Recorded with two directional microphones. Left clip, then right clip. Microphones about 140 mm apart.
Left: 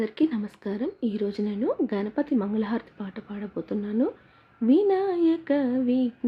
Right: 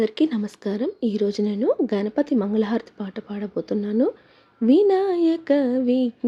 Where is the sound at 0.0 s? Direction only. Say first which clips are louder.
Right 4 dB; 40° right (ahead or behind).